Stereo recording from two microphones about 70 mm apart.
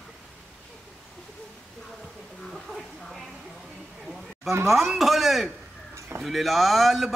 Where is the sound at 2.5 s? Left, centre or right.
Centre.